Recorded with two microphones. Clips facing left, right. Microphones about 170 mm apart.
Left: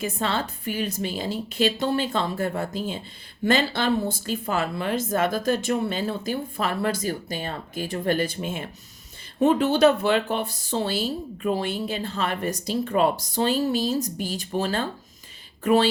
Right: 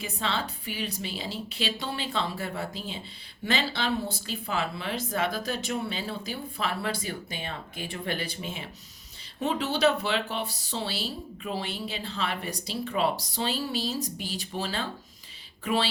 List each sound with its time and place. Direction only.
0.0 s speech: 45° left (ahead or behind)